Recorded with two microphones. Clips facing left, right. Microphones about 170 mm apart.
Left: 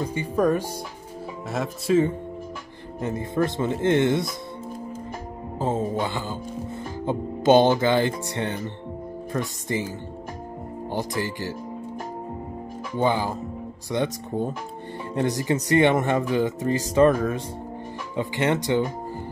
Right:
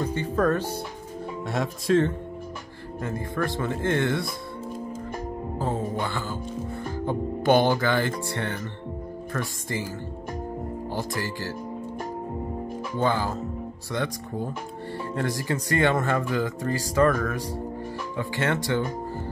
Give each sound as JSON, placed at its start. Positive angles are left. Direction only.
{"t": 0.0, "sound": "speech", "side_deg": 10}
{"t": 3.0, "sound": "music", "side_deg": 20}
{"t": 5.6, "sound": "music", "side_deg": 20}
{"t": 10.9, "sound": "music", "side_deg": 20}
{"t": 12.9, "sound": "speech", "side_deg": 15}
{"t": 13.9, "sound": "music", "side_deg": 20}